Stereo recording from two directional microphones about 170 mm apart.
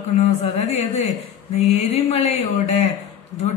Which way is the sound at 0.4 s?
40° left (ahead or behind).